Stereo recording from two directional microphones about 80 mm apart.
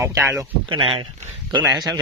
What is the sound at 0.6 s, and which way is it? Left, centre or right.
Speech, right.